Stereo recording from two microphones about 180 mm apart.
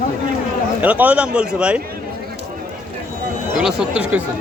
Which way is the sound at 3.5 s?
5° right (ahead or behind).